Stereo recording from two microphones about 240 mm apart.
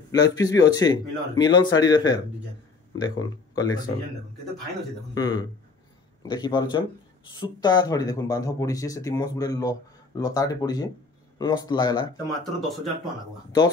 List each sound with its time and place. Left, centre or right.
0.1 s speech: centre
5.1 s speech: centre
12.3 s speech: centre